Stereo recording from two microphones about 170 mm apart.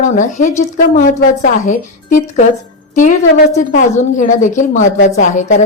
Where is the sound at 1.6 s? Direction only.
50° left (ahead or behind).